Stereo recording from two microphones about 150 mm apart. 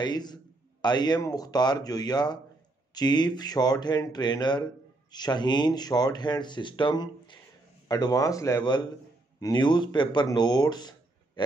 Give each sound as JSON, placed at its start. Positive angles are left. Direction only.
{"t": 0.0, "sound": "speech", "side_deg": 30}